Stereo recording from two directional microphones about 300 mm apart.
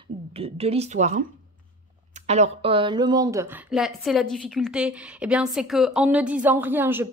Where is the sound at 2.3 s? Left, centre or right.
Centre.